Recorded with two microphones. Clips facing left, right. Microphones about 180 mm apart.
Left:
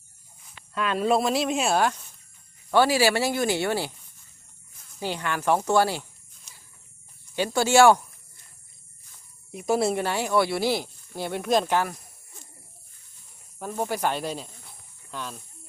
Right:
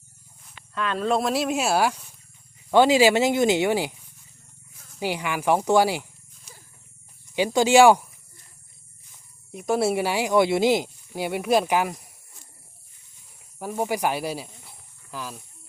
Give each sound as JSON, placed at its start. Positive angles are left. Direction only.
{"t": 0.7, "sound": "speech", "side_deg": 10}
{"t": 2.6, "sound": "speech", "side_deg": -20}
{"t": 7.3, "sound": "speech", "side_deg": -15}
{"t": 9.5, "sound": "speech", "side_deg": 0}
{"t": 13.6, "sound": "speech", "side_deg": -10}